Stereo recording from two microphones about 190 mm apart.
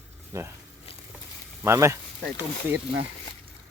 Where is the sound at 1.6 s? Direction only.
15° right (ahead or behind).